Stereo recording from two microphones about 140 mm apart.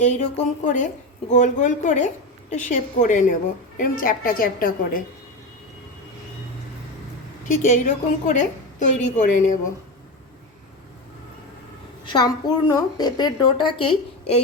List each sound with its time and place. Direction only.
0.0 s a woman's voice: 60° left (ahead or behind)
3.8 s a woman's voice: 85° left
7.4 s a woman's voice: 65° left (ahead or behind)
12.0 s a woman's voice: 30° left (ahead or behind)